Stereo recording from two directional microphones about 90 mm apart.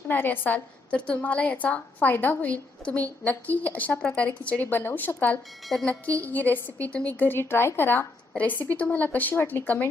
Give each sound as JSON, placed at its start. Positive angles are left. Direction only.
{"t": 0.1, "sound": "a woman's voice", "side_deg": 20}
{"t": 5.6, "sound": "speech", "side_deg": 0}
{"t": 5.9, "sound": "a woman's voice", "side_deg": 20}